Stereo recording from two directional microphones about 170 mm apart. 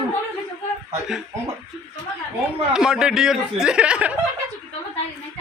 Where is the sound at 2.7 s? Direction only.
5° right (ahead or behind).